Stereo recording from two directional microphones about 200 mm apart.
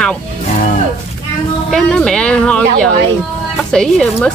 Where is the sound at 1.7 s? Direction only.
5° left (ahead or behind).